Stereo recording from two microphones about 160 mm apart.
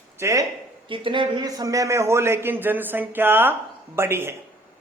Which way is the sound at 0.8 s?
30° right (ahead or behind).